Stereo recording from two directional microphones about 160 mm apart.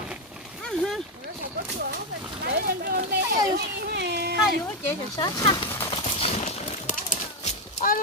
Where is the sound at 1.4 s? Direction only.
65° right (ahead or behind).